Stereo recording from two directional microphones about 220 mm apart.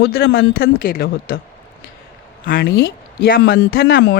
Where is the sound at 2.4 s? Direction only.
40° left (ahead or behind).